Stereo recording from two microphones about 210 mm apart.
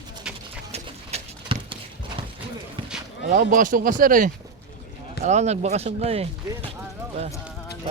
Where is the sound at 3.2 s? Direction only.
40° right (ahead or behind).